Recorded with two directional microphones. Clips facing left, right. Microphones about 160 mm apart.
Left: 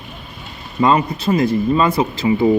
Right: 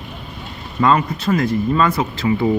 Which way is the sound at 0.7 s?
20° left (ahead or behind).